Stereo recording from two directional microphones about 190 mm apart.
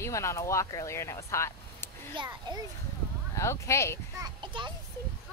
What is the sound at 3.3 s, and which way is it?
Speech, 15° left (ahead or behind).